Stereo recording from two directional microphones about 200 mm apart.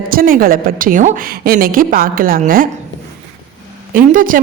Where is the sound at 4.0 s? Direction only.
45° right (ahead or behind).